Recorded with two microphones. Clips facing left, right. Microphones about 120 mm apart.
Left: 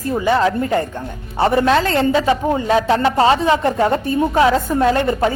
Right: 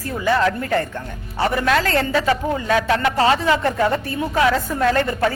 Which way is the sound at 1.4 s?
30° left (ahead or behind).